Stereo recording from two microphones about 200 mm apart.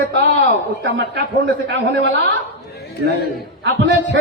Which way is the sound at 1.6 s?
60° right (ahead or behind).